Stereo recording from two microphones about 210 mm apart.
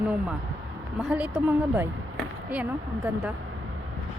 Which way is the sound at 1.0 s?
5° right (ahead or behind).